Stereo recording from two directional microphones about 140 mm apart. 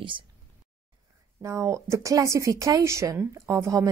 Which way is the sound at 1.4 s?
20° right (ahead or behind).